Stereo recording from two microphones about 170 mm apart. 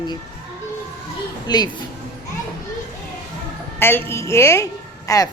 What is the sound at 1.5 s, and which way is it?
Speech, 25° left (ahead or behind).